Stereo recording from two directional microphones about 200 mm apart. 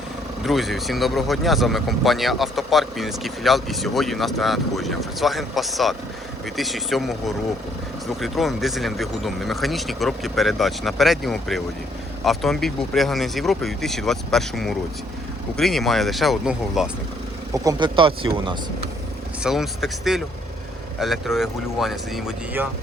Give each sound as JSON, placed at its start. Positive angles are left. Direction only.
{"t": 0.4, "sound": "speech", "side_deg": 0}
{"t": 17.5, "sound": "speech", "side_deg": -15}
{"t": 19.4, "sound": "speech", "side_deg": 0}